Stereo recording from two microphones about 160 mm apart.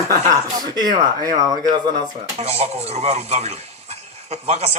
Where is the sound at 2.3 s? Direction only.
40° right (ahead or behind).